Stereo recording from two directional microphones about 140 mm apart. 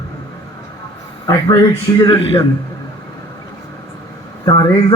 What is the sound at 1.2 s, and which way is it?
Speech, 20° left (ahead or behind).